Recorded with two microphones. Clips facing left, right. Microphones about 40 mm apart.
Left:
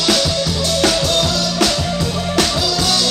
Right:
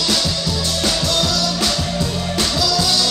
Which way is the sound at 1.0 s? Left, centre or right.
Left.